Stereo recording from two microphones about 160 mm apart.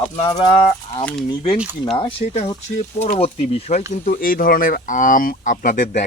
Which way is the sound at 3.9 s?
55° left (ahead or behind).